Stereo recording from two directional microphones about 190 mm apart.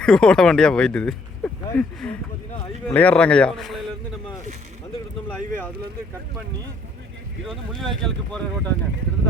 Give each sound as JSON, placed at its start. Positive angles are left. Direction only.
{"t": 0.0, "sound": "speech", "side_deg": 5}
{"t": 7.4, "sound": "speech", "side_deg": 0}